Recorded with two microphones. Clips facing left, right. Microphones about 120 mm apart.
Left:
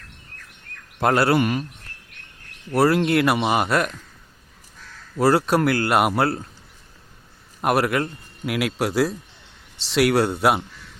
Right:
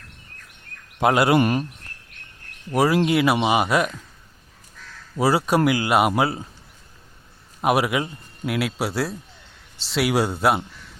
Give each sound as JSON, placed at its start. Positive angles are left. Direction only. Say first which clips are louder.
{"t": 0.9, "sound": "a man's voice", "louder": "right 1 dB", "side_deg": -10}
{"t": 1.4, "sound": "speech", "louder": "right 2 dB", "side_deg": -40}
{"t": 2.6, "sound": "speech", "louder": "left 1 dB", "side_deg": -5}
{"t": 5.1, "sound": "speech", "louder": "left 1 dB", "side_deg": -10}
{"t": 7.6, "sound": "a man's voice", "louder": "even", "side_deg": -10}